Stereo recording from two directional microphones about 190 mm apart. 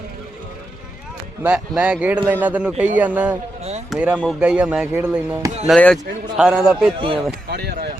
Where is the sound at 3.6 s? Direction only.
35° right (ahead or behind).